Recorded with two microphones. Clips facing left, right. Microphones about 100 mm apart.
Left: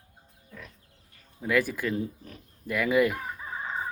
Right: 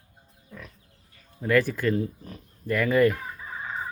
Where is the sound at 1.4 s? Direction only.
5° left (ahead or behind).